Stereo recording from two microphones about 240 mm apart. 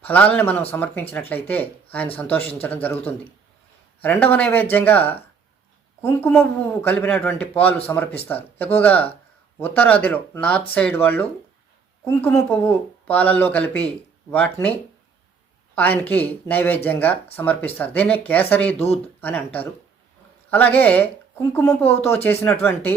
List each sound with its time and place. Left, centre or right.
0.0 s speech: centre
18.8 s speech: left
19.2 s speech: centre
20.5 s speech: centre